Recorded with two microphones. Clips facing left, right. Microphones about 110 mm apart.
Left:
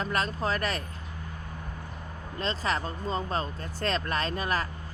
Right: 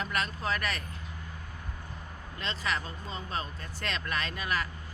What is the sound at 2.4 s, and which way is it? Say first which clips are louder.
Speech: left 4 dB; 35° left (ahead or behind).